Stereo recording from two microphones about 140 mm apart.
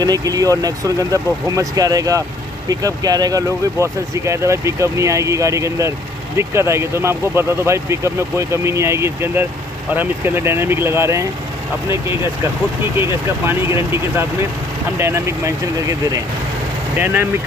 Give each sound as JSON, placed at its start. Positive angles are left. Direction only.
{"t": 0.0, "sound": "speech", "side_deg": -25}
{"t": 12.9, "sound": "speech", "side_deg": -15}
{"t": 17.0, "sound": "speech", "side_deg": -15}